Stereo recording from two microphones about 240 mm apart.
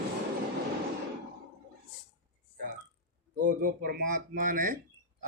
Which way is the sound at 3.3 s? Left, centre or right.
Right.